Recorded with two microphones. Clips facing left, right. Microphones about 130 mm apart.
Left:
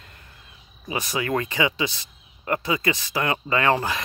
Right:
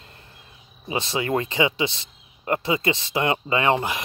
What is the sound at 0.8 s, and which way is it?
Speech, 25° right (ahead or behind).